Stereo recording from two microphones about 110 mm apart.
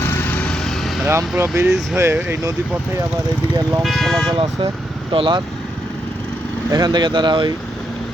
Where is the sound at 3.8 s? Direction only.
Centre (ahead or behind).